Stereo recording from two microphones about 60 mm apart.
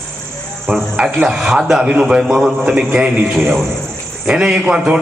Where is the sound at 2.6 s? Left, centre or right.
Right.